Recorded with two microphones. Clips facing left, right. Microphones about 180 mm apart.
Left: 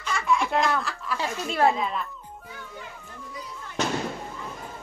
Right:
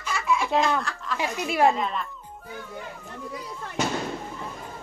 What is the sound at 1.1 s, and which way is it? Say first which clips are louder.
Speech: right 2 dB; 15° right (ahead or behind).